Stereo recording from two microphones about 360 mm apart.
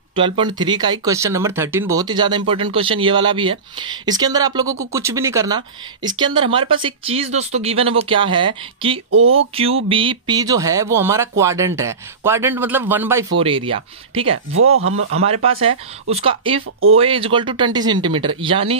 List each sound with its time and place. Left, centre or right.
0.1 s speech: centre
9.1 s speech: right
9.8 s speech: centre
14.5 s speech: right
15.2 s speech: centre